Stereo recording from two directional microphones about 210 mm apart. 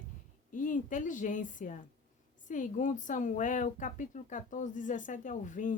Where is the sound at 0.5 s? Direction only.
40° left (ahead or behind).